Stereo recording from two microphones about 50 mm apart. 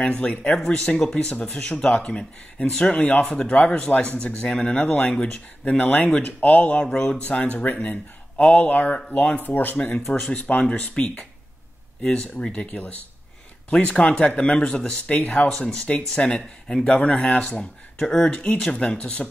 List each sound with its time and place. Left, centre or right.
0.2 s speech: left
2.9 s speech: left
6.5 s speech: left
6.8 s speech: centre
7.2 s speech: left
7.7 s speech: left
12.5 s speech: left
15.1 s speech: left
15.4 s speech: centre
15.9 s speech: left